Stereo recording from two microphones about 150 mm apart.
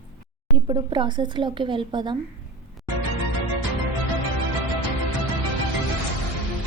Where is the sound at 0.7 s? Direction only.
30° right (ahead or behind).